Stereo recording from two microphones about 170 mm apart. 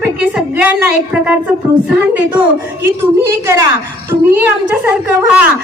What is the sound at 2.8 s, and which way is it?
A woman's voice, 15° right (ahead or behind).